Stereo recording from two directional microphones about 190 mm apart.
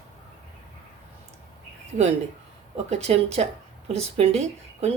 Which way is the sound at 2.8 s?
35° right (ahead or behind).